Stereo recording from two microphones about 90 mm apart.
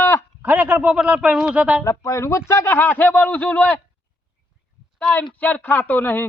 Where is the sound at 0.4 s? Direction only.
15° right (ahead or behind).